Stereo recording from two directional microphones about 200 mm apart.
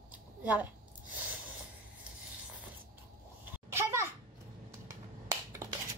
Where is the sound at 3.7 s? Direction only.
15° right (ahead or behind).